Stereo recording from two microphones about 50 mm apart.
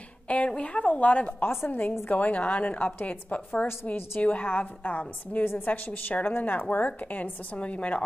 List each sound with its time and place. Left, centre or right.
0.3 s a woman's voice: left